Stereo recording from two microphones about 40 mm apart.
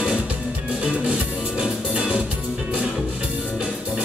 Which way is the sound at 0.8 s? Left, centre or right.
Right.